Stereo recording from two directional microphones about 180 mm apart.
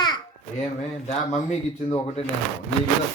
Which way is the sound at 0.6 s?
40° left (ahead or behind).